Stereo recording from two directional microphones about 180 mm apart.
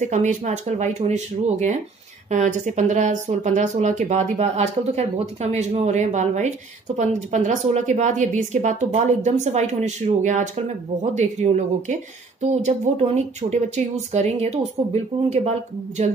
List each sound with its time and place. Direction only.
0.0 s speech: 45° right (ahead or behind)